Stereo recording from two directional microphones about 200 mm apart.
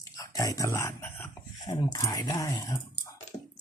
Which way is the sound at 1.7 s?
20° left (ahead or behind).